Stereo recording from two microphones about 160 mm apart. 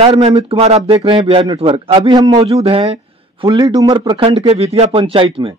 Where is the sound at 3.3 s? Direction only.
25° right (ahead or behind).